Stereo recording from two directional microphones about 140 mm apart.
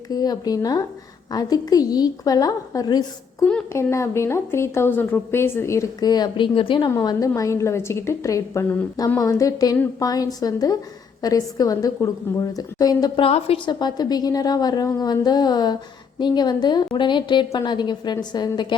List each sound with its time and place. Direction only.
0.1 s a woman's voice: 25° left (ahead or behind)
13.2 s a woman's voice: 40° left (ahead or behind)